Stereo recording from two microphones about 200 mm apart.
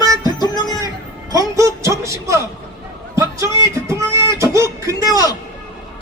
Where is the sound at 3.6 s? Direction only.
15° right (ahead or behind).